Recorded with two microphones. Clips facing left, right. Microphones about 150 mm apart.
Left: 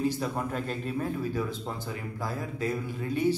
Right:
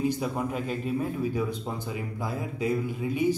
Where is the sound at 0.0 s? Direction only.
15° right (ahead or behind).